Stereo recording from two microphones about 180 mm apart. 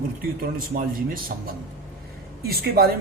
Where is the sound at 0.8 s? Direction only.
50° right (ahead or behind).